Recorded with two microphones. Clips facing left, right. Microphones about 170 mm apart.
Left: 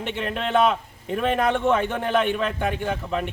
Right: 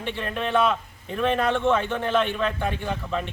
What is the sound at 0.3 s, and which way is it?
A man's voice, 15° left (ahead or behind).